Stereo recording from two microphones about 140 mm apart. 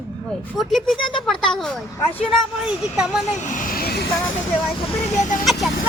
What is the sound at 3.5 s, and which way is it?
Speech, 90° left.